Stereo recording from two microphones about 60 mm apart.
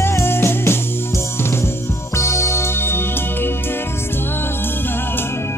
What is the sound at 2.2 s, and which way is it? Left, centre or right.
Music, left.